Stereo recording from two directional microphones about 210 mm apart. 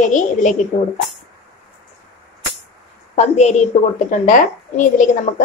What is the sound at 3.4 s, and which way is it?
Speech, 30° left (ahead or behind).